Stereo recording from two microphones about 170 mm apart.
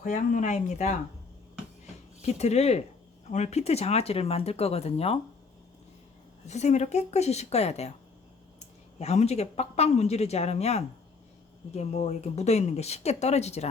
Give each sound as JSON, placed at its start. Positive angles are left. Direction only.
{"t": 0.0, "sound": "speech", "side_deg": 50}
{"t": 2.2, "sound": "speech", "side_deg": 40}
{"t": 6.4, "sound": "speech", "side_deg": 40}